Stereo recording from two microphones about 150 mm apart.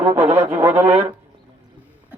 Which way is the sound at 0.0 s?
15° right (ahead or behind).